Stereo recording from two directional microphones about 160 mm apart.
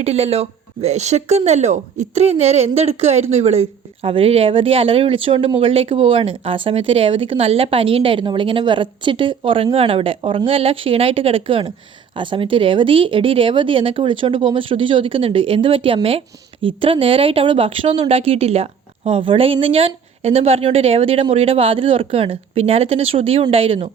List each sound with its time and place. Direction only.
0.0 s speech: 40° right (ahead or behind)